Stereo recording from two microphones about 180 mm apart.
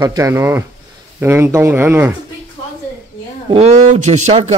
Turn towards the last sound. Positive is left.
turn(degrees=-40)  # may be behind; listen again after turning